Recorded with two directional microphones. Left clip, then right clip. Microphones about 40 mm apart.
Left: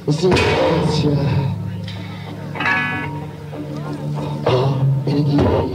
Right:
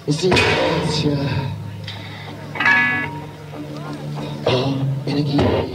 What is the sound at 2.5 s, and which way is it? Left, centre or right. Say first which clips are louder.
Music: right 3 dB; right.